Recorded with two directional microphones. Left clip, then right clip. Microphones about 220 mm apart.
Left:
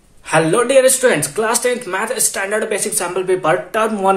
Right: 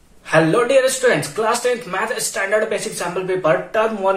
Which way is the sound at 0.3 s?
35° left (ahead or behind).